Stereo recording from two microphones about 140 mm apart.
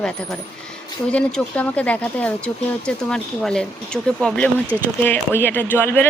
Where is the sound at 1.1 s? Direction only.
10° left (ahead or behind).